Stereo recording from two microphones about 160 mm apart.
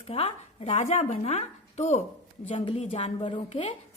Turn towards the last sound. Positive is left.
turn(degrees=30)  # may be behind; listen again after turning